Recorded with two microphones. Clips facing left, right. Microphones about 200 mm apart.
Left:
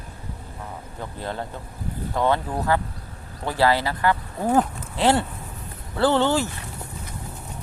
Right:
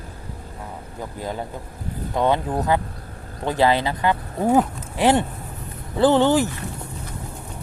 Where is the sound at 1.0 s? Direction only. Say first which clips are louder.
Right 2 dB; 10° right (ahead or behind).